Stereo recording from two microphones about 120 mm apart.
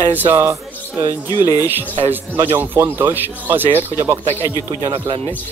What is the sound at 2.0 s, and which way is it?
Speech, 15° right (ahead or behind).